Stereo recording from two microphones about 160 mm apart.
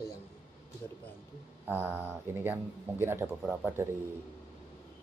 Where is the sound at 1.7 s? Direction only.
10° right (ahead or behind).